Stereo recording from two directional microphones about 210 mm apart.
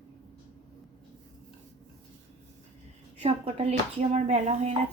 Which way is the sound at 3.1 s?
30° right (ahead or behind).